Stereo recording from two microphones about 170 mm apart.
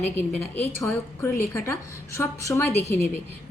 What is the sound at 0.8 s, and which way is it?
A woman's voice, 15° left (ahead or behind).